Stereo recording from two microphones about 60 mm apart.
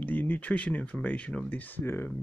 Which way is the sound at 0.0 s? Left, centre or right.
Left.